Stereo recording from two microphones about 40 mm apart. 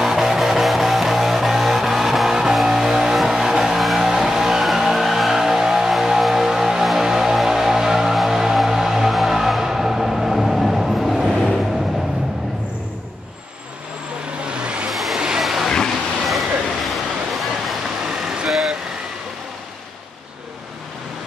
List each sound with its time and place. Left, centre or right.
0.0 s music: centre
11.3 s vehicle: centre
14.4 s vehicle: right
14.9 s a sound: centre
15.1 s vehicle: centre
15.4 s vehicle: centre
16.3 s a sound: centre
18.0 s vehicle: centre